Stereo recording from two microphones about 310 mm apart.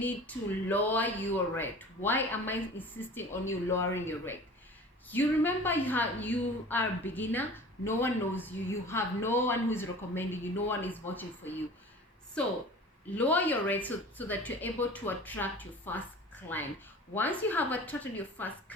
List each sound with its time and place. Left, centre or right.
0.0 s speech: centre